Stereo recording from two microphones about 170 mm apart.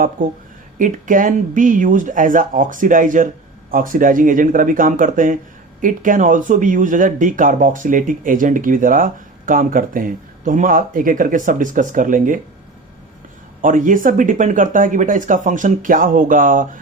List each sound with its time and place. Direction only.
0.8 s speech: 50° right (ahead or behind)
13.6 s speech: 50° right (ahead or behind)